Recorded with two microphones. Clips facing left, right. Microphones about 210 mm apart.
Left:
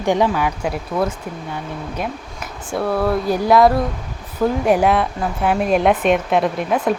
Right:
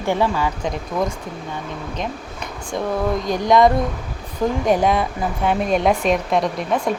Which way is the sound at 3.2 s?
5° left (ahead or behind).